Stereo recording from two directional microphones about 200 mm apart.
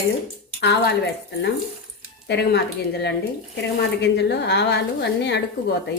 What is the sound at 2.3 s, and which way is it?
Speech, 55° left (ahead or behind).